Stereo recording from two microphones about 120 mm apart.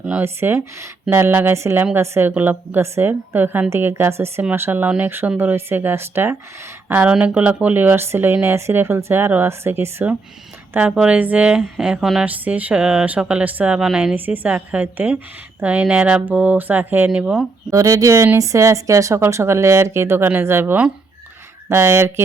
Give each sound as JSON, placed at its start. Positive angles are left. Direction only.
{"t": 0.0, "sound": "speech", "side_deg": -15}
{"t": 17.7, "sound": "speech", "side_deg": -25}